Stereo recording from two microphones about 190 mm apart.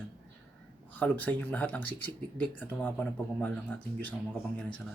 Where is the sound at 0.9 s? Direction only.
10° left (ahead or behind).